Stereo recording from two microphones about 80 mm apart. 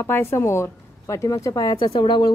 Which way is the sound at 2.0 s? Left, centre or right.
Left.